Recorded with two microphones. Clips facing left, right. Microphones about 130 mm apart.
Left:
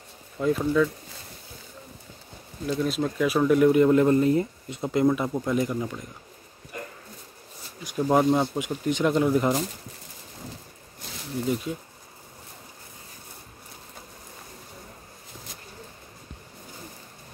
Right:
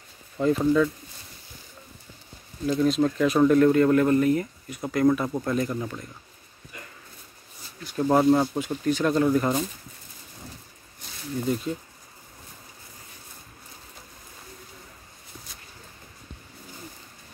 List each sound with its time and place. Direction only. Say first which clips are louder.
0.4 s speech: right 2 dB; centre (ahead or behind)
2.6 s speech: right 4 dB; 5° left (ahead or behind); by 5.0 s 25° left (ahead or behind)
5.3 s speech: left 1 dB; 10° left (ahead or behind)
7.8 s speech: right 1 dB; 10° left (ahead or behind)
8.2 s speech: right 3 dB; centre (ahead or behind)
8.5 s speech: right 1 dB; 15° left (ahead or behind)
11.4 s speech: even; 5° left (ahead or behind)